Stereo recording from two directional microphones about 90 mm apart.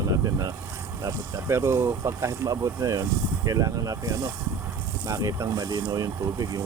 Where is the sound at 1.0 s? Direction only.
30° right (ahead or behind).